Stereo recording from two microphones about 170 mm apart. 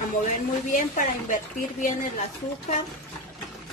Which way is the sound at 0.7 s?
50° left (ahead or behind).